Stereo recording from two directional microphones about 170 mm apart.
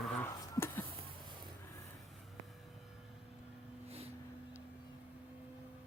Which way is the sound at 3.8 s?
35° right (ahead or behind).